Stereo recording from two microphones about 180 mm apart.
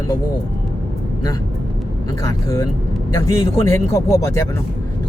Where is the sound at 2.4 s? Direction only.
15° left (ahead or behind).